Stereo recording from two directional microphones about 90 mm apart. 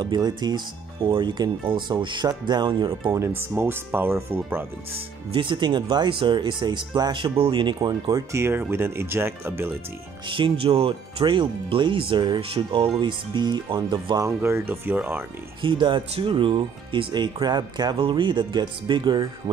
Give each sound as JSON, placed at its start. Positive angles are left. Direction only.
{"t": 0.0, "sound": "speech", "side_deg": -55}
{"t": 1.0, "sound": "speech", "side_deg": -75}
{"t": 3.1, "sound": "speech", "side_deg": -30}
{"t": 4.9, "sound": "speech", "side_deg": -70}
{"t": 8.3, "sound": "speech", "side_deg": -30}
{"t": 10.2, "sound": "speech", "side_deg": -70}
{"t": 14.2, "sound": "speech", "side_deg": -30}
{"t": 15.6, "sound": "speech", "side_deg": -65}
{"t": 17.9, "sound": "speech", "side_deg": -65}